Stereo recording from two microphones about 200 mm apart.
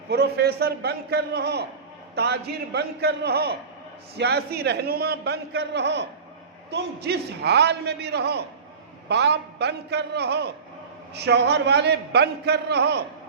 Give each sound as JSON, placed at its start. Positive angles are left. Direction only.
{"t": 0.1, "sound": "a man's voice", "side_deg": -55}